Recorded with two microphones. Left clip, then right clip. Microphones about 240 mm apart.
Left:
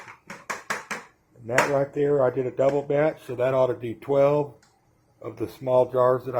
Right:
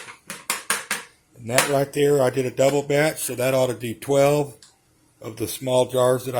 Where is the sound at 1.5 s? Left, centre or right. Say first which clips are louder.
Right 2 dB; right.